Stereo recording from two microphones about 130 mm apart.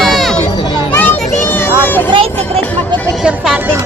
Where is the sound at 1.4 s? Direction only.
20° left (ahead or behind).